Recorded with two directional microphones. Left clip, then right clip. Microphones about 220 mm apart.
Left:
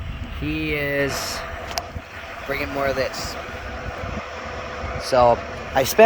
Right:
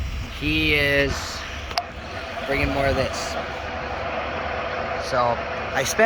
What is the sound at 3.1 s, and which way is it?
Speech, 65° left (ahead or behind).